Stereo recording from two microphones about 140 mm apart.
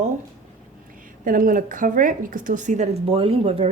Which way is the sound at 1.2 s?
75° right (ahead or behind).